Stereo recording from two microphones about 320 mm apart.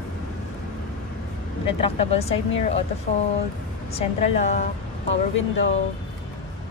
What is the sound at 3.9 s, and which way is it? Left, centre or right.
Speech, left.